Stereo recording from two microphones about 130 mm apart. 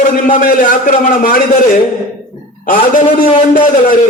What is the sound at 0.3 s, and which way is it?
A man's voice, 90° left.